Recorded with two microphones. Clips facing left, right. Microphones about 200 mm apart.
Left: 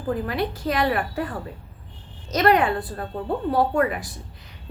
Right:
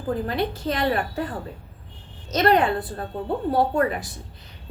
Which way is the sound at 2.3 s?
25° right (ahead or behind).